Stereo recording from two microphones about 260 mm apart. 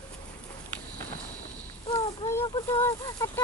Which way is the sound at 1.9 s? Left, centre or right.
Left.